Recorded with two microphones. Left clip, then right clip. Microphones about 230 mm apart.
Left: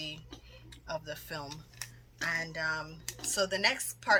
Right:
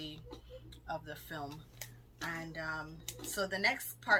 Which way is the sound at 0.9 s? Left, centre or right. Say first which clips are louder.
Left 4 dB; left.